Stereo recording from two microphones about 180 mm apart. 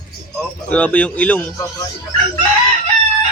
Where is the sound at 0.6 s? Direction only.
10° left (ahead or behind).